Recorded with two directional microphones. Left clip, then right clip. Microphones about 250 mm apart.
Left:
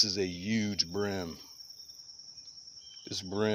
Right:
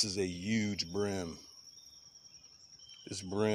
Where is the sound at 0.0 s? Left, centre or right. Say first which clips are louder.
Left 5 dB; centre.